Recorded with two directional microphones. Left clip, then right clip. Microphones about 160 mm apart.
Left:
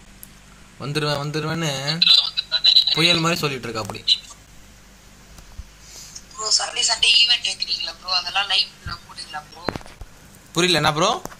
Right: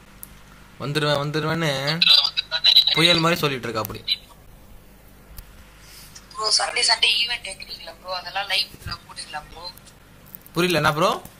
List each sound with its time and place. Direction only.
0.7 s a man's voice: centre (ahead or behind)
1.9 s telephone: 15° right (ahead or behind)
3.2 s a man's voice: centre (ahead or behind)
6.3 s a woman's voice: 15° right (ahead or behind)
10.5 s a man's voice: 10° left (ahead or behind)